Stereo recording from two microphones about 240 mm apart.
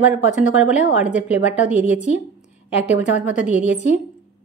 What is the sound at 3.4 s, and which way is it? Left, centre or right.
Speech, left.